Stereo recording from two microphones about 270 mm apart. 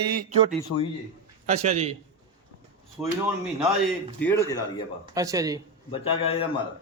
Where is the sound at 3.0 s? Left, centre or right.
Centre.